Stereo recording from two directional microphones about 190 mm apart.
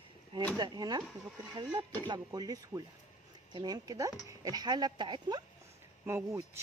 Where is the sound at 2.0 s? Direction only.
20° right (ahead or behind).